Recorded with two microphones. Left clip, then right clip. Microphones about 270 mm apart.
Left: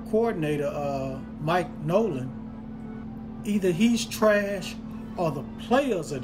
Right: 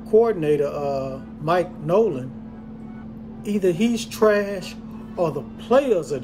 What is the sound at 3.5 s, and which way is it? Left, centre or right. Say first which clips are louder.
Speech: right 4 dB; right.